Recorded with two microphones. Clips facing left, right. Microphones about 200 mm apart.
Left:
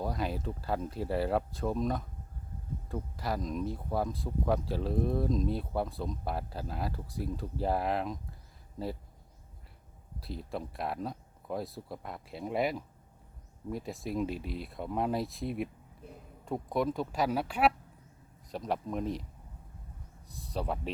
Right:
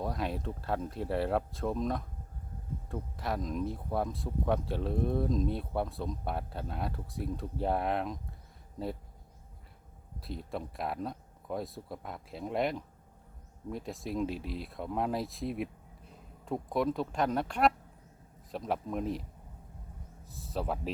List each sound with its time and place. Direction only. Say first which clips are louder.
0.0 s speech: even; centre (ahead or behind)
10.2 s speech: even; centre (ahead or behind)
20.2 s speech: even; centre (ahead or behind)